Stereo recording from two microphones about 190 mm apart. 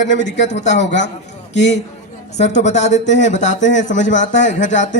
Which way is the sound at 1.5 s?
70° left (ahead or behind).